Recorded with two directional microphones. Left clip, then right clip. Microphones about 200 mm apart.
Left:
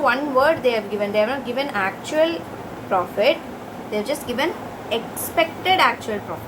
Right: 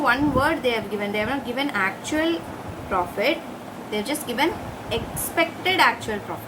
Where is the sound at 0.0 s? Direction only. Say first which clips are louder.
Left 3 dB; 15° right (ahead or behind).